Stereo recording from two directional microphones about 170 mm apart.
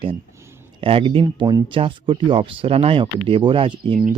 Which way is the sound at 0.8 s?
30° right (ahead or behind).